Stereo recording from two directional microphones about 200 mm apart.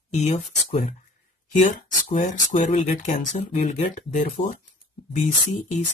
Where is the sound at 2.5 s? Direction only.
40° left (ahead or behind).